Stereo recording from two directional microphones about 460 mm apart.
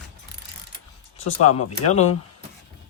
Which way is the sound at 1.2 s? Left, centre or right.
Left.